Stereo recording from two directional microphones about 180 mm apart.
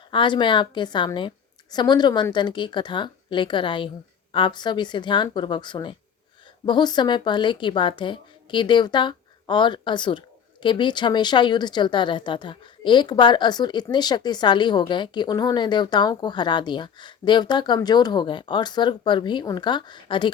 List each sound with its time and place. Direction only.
0.1 s speech: 25° left (ahead or behind)